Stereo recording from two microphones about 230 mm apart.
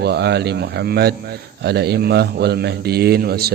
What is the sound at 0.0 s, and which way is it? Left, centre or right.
Speech, right.